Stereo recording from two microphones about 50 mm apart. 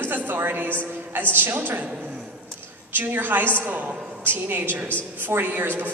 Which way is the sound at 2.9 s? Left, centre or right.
Right.